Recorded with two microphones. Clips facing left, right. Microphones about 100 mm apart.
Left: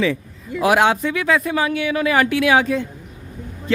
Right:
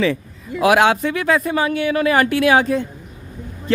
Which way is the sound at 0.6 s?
90° right.